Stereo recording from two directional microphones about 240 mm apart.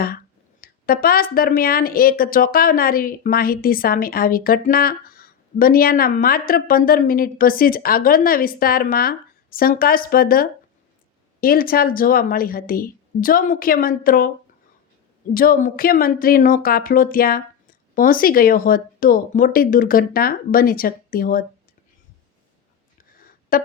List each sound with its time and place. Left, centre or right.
0.6 s speech: left
15.3 s speech: left
23.0 s a sound: left